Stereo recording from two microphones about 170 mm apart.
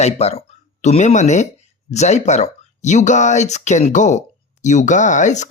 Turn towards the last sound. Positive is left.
turn(degrees=45)  # may be behind; listen again after turning